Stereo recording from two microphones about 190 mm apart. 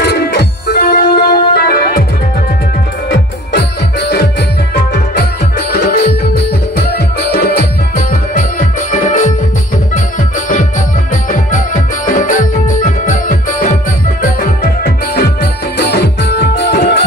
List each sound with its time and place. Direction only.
0.0 s music: 60° left (ahead or behind)
3.5 s music: 60° left (ahead or behind); by 9.3 s 45° left (ahead or behind)
12.1 s music: 45° left (ahead or behind)
14.8 s music: 60° left (ahead or behind)